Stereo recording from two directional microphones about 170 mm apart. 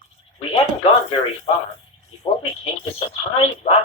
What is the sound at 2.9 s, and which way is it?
Speech, 35° left (ahead or behind).